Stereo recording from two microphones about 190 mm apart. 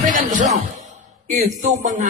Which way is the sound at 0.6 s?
40° right (ahead or behind).